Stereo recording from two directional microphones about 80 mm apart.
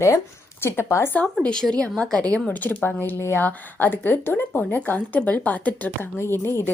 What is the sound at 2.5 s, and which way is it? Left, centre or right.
Speech, left.